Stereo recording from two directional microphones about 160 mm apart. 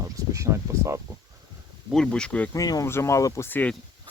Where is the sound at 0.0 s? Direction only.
20° right (ahead or behind).